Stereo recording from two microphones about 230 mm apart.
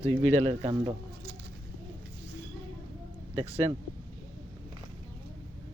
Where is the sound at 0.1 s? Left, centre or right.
Right.